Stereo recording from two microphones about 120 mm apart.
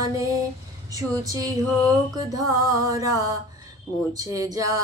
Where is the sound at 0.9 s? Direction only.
30° right (ahead or behind).